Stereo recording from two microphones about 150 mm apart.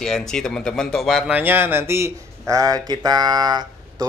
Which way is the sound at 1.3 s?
15° right (ahead or behind).